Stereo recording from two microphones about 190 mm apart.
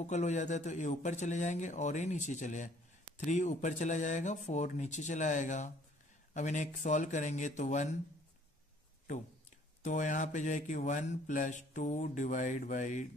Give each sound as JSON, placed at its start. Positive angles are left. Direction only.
{"t": 0.0, "sound": "speech", "side_deg": 40}
{"t": 9.8, "sound": "speech", "side_deg": 40}